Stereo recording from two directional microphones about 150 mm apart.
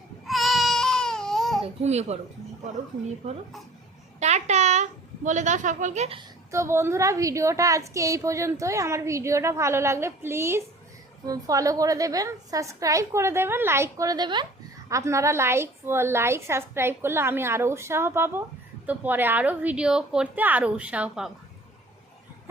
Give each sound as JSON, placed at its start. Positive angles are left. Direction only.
{"t": 0.3, "sound": "baby cry", "side_deg": 0}
{"t": 1.6, "sound": "speech", "side_deg": -45}
{"t": 4.2, "sound": "a woman's voice", "side_deg": -50}
{"t": 6.5, "sound": "a woman's voice", "side_deg": -20}